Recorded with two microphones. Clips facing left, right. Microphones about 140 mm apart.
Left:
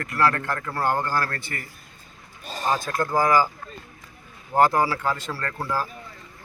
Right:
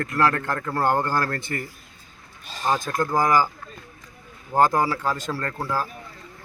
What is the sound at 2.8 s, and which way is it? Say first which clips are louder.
Speech: even; 15° right (ahead or behind).